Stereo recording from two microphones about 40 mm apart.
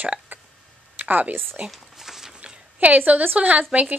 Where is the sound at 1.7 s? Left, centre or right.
Centre.